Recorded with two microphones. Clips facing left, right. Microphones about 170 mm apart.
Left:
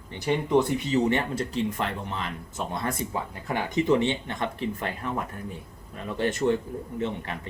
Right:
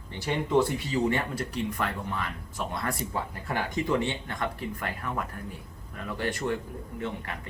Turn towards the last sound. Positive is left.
turn(degrees=25)  # may be behind; listen again after turning